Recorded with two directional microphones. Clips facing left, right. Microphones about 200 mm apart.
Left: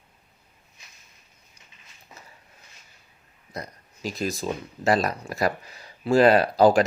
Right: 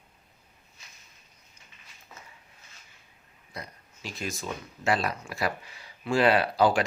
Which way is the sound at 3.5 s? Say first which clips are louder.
Left 5 dB; 40° left (ahead or behind).